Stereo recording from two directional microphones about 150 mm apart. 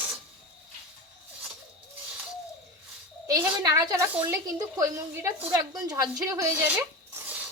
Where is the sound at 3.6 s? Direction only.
25° right (ahead or behind).